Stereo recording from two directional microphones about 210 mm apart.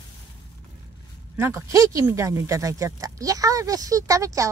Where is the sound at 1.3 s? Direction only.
10° right (ahead or behind).